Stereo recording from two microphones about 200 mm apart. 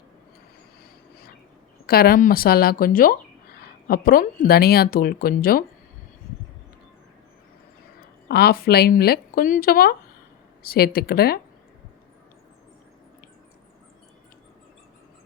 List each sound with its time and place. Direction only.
1.9 s speech: 45° left (ahead or behind)
8.3 s speech: 50° left (ahead or behind)